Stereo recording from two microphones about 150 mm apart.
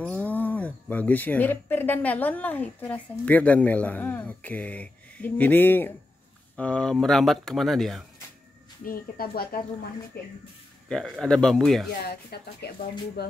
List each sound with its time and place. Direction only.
0.0 s speech: 10° left (ahead or behind)
8.8 s speech: 75° left (ahead or behind)
10.9 s speech: 5° left (ahead or behind)
12.1 s speech: 90° left